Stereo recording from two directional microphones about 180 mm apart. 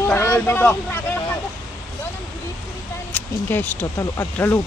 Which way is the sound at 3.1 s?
10° left (ahead or behind).